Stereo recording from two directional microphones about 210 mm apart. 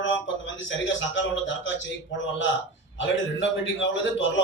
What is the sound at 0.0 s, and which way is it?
A man's voice, 60° left (ahead or behind).